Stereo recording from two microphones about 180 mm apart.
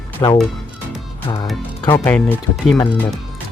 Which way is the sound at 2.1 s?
10° left (ahead or behind).